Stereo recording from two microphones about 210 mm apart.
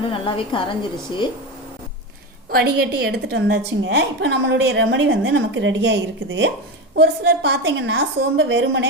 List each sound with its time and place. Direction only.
0.1 s a woman's voice: 25° left (ahead or behind)
2.5 s a woman's voice: 50° right (ahead or behind)